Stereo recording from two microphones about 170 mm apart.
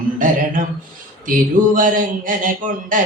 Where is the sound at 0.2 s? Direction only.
50° right (ahead or behind).